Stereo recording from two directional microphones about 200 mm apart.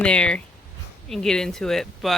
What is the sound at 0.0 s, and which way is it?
Speech, 5° left (ahead or behind).